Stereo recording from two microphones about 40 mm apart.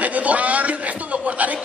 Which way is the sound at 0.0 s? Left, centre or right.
Right.